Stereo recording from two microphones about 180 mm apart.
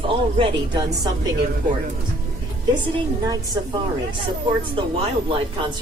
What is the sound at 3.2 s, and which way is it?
Speech, 20° right (ahead or behind).